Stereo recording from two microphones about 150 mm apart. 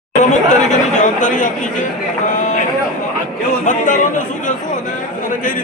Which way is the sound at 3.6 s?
60° left (ahead or behind).